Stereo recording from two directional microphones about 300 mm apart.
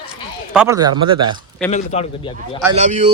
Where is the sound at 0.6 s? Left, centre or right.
Centre.